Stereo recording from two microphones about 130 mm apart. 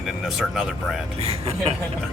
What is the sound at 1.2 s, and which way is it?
Speech, 50° right (ahead or behind).